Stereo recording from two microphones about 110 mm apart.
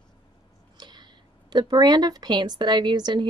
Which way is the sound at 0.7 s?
40° right (ahead or behind).